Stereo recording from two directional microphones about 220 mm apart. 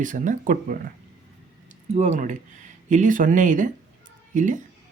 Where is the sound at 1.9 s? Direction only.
35° right (ahead or behind).